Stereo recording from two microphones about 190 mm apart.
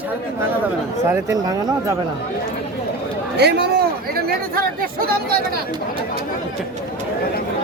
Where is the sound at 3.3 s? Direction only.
60° right (ahead or behind).